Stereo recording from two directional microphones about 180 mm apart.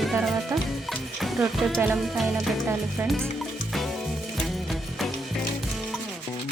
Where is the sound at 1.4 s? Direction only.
Centre (ahead or behind).